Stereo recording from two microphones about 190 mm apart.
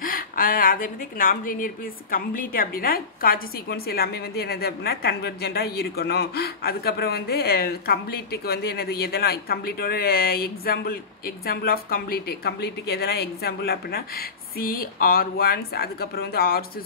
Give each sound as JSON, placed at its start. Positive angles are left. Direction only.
{"t": 0.0, "sound": "a woman's voice", "side_deg": 50}